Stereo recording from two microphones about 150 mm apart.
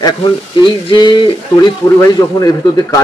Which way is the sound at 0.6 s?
30° left (ahead or behind).